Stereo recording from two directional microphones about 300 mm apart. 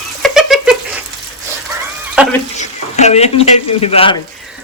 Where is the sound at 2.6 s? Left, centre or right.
Left.